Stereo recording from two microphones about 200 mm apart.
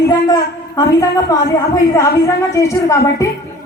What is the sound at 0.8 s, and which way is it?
A woman's voice, 15° left (ahead or behind).